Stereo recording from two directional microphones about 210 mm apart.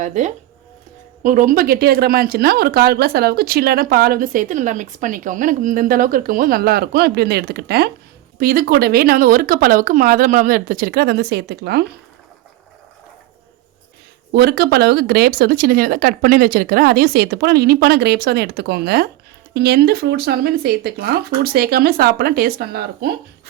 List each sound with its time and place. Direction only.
0.0 s speech: 35° right (ahead or behind)
14.3 s speech: 50° right (ahead or behind)